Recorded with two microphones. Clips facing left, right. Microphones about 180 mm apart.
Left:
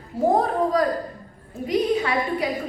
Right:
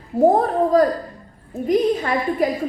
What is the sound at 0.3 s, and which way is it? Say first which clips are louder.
A woman's voice: right 4 dB; 45° right (ahead or behind).